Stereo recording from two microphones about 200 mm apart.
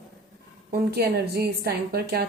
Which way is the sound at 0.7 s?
50° right (ahead or behind).